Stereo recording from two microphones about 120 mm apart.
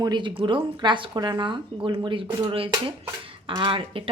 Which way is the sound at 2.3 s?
30° right (ahead or behind).